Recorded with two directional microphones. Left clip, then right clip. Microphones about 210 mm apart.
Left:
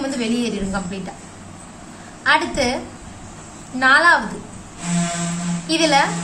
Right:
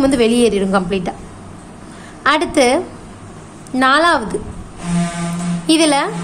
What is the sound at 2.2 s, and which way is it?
Speech, 55° right (ahead or behind).